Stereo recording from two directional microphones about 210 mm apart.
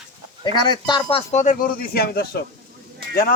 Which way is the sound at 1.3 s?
35° left (ahead or behind).